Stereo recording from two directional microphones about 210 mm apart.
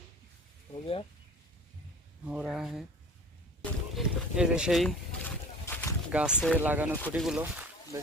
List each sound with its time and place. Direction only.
0.7 s speech: 25° left (ahead or behind)
2.2 s speech: 5° right (ahead or behind)
3.6 s a sound: centre (ahead or behind)
5.6 s a sound: 10° left (ahead or behind)
6.1 s speech: 5° right (ahead or behind)
6.3 s speech: 5° left (ahead or behind)
6.6 s speech: 10° right (ahead or behind)